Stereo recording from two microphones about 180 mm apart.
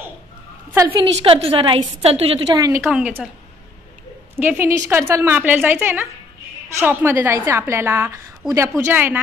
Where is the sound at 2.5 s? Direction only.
20° right (ahead or behind).